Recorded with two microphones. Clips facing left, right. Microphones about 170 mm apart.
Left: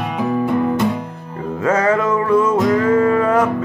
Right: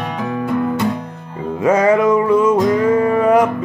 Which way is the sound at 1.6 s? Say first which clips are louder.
Right 3 dB; 15° right (ahead or behind).